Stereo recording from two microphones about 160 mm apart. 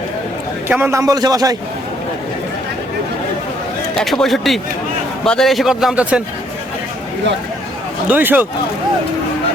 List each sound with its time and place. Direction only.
0.7 s a man's voice: 15° right (ahead or behind)
3.9 s a man's voice: centre (ahead or behind)
8.0 s speech: 10° right (ahead or behind)